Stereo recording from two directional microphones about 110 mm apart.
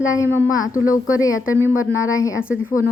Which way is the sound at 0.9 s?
30° left (ahead or behind).